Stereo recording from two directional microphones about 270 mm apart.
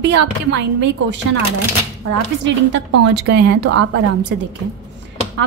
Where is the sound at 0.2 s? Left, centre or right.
Right.